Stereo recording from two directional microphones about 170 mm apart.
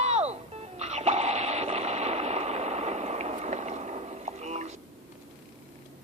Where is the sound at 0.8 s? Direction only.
40° right (ahead or behind).